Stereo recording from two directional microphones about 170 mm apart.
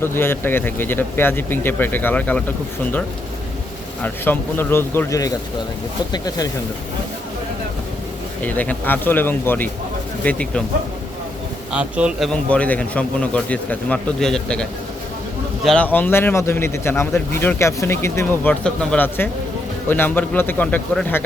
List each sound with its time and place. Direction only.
0.0 s a man's voice: 15° left (ahead or behind)
4.0 s a man's voice: 10° left (ahead or behind)
8.4 s a man's voice: 10° left (ahead or behind)
11.7 s a man's voice: 5° right (ahead or behind); by 21.2 s 10° left (ahead or behind)